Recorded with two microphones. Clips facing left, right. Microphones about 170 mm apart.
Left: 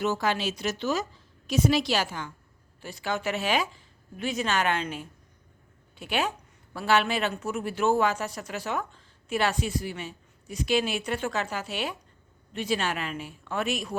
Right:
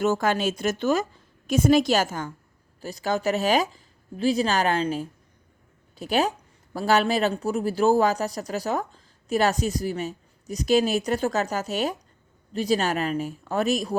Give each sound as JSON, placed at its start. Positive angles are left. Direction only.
{"t": 0.0, "sound": "speech", "side_deg": -45}